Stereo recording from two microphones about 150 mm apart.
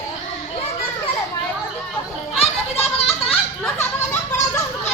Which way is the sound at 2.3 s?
40° left (ahead or behind).